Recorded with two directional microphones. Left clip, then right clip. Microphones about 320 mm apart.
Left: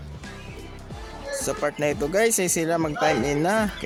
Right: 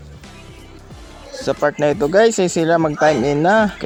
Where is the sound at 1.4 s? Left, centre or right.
Left.